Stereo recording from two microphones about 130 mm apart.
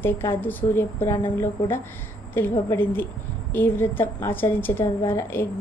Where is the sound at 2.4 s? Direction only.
15° left (ahead or behind).